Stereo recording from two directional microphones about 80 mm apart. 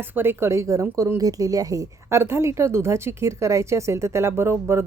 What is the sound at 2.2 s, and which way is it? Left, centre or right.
A woman's voice, right.